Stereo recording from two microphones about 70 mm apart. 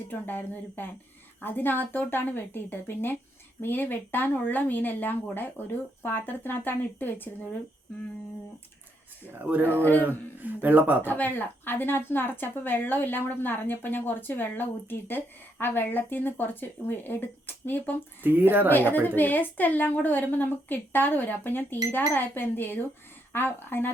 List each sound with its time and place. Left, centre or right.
0.1 s a woman's voice: left
9.4 s speech: right
11.0 s a woman's voice: left
18.2 s speech: right
18.7 s a woman's voice: left